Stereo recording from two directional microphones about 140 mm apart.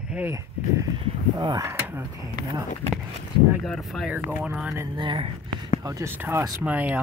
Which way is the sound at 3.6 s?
Centre (ahead or behind).